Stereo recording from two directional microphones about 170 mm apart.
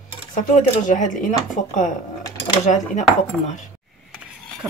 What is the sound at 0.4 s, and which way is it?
Speech, 50° left (ahead or behind).